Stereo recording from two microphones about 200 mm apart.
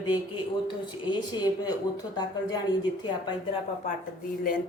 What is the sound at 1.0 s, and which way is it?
Speech, 20° left (ahead or behind).